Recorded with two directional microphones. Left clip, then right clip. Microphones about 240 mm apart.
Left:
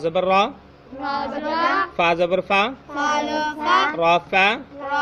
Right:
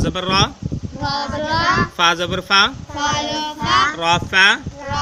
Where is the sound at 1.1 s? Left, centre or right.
Right.